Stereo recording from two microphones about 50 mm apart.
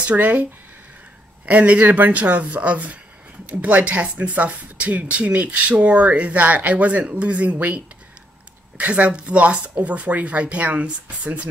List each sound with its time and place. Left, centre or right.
0.0 s speech: right